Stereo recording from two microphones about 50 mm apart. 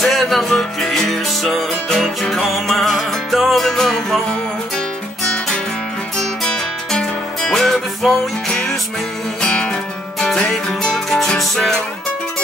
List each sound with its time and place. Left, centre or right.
0.0 s music: centre
5.2 s music: left
9.4 s music: centre